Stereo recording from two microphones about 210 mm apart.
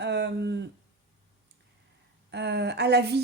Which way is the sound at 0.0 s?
55° right (ahead or behind).